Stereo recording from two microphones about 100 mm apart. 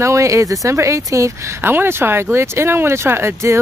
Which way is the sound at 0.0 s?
30° right (ahead or behind).